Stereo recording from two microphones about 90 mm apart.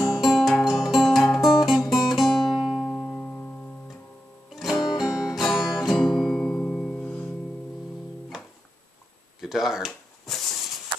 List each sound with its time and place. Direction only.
0.2 s music: centre (ahead or behind)
3.1 s music: 15° left (ahead or behind)
4.6 s music: centre (ahead or behind)
8.3 s music: 5° right (ahead or behind)
9.4 s a sound: 5° right (ahead or behind)